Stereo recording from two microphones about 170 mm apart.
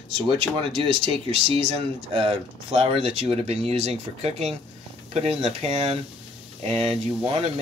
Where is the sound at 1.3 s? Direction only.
35° right (ahead or behind).